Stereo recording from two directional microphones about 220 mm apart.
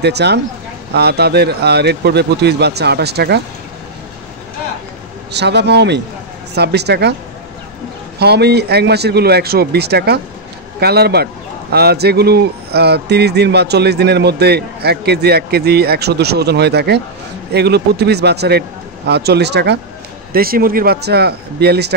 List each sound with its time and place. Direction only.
0.0 s a man's voice: 50° right (ahead or behind)
5.3 s a man's voice: 50° right (ahead or behind)
8.2 s a man's voice: 50° right (ahead or behind)